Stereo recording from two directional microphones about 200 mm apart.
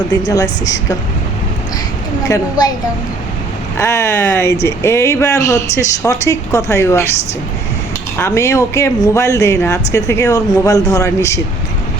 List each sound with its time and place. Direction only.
0.3 s speech: 20° left (ahead or behind)
2.2 s speech: 20° left (ahead or behind)
3.8 s speech: 15° left (ahead or behind)
8.2 s speech: 15° left (ahead or behind)